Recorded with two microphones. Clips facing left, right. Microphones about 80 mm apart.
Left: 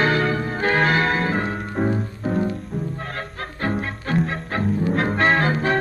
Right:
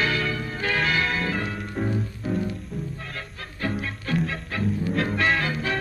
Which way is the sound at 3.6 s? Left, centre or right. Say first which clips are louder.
Left 4 dB; left.